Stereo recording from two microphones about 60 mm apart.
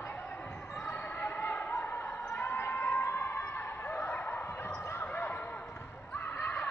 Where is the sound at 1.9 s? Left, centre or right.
Left.